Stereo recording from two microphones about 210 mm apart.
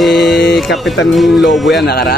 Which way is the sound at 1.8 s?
50° left (ahead or behind).